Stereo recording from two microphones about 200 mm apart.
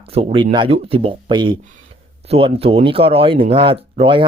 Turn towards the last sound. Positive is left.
turn(degrees=-25)  # may be behind; listen again after turning